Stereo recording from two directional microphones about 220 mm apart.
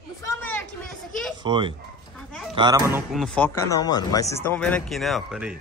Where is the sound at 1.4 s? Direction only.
20° right (ahead or behind).